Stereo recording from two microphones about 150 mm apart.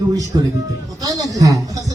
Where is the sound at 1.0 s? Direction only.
25° right (ahead or behind).